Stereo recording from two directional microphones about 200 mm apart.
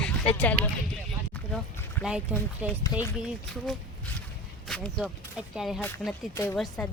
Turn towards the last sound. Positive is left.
turn(degrees=0)  # may be behind; listen again after turning